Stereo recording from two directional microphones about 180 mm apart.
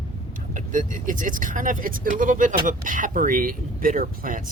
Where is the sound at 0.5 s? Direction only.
45° right (ahead or behind).